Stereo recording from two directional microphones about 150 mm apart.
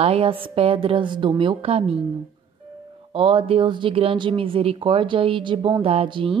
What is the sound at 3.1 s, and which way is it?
A woman's voice, 35° right (ahead or behind).